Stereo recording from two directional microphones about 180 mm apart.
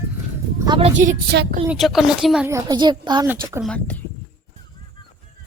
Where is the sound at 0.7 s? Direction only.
30° right (ahead or behind).